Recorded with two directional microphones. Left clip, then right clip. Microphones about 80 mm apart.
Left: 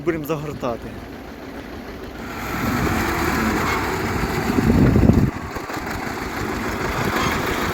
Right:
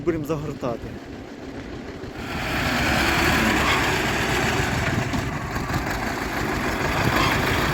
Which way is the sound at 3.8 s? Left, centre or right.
Right.